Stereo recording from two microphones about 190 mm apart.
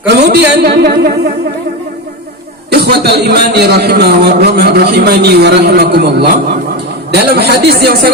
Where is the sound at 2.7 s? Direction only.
60° right (ahead or behind).